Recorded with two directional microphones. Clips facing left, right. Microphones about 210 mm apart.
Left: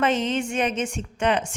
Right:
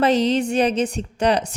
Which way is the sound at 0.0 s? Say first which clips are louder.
Right 5 dB; 35° right (ahead or behind).